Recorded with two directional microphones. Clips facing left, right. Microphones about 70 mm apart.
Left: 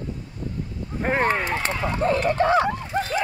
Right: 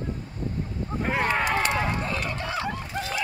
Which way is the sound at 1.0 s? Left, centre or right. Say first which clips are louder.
Left 3 dB; left.